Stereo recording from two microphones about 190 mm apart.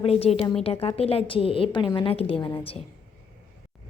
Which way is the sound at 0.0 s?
30° left (ahead or behind).